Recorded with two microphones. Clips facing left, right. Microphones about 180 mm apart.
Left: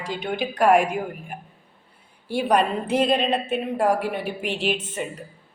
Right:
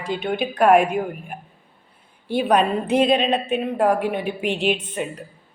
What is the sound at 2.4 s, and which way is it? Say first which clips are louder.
A woman's voice: right 2 dB; 60° right (ahead or behind).